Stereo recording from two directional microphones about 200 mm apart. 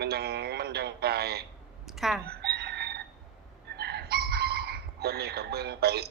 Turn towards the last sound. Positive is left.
turn(degrees=-55)  # may be behind; listen again after turning